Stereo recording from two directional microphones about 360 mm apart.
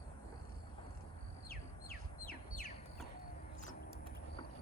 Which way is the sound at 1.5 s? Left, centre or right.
Left.